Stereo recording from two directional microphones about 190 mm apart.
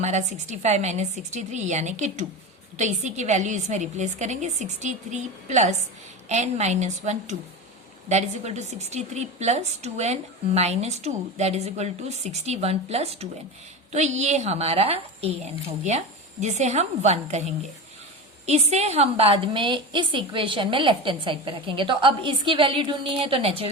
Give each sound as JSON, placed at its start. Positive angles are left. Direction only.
{"t": 0.0, "sound": "a woman's voice", "side_deg": -35}
{"t": 18.7, "sound": "a woman's voice", "side_deg": -35}